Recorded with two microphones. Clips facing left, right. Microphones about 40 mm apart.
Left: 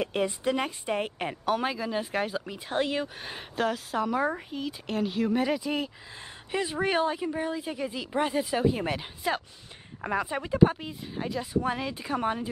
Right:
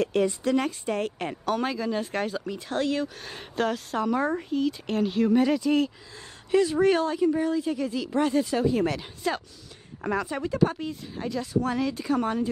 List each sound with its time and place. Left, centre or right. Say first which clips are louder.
0.0 s speech: right 3 dB; centre
3.5 s speech: right 1 dB; centre